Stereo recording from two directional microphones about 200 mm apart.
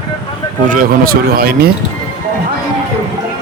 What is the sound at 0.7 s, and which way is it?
Speech, 45° right (ahead or behind).